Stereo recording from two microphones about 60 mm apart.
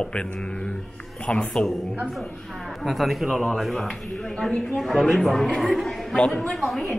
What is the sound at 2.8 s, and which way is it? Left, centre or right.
A man's voice, centre.